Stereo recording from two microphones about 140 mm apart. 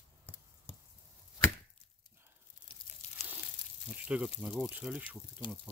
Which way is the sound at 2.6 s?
5° right (ahead or behind).